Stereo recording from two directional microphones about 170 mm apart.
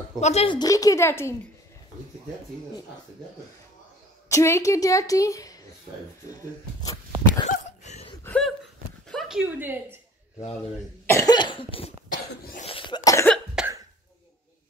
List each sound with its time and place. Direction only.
0.2 s speech: 40° left (ahead or behind)
0.6 s speech: 20° left (ahead or behind)
4.3 s a woman's voice: 20° left (ahead or behind)
6.8 s a sound: 20° left (ahead or behind)
7.4 s a sound: 45° left (ahead or behind)
8.2 s a woman's voice: 5° left (ahead or behind); by 9.9 s 10° right (ahead or behind)
11.1 s a woman's voice: 20° left (ahead or behind)
12.6 s cough: 30° left (ahead or behind)
13.6 s cough: 5° right (ahead or behind)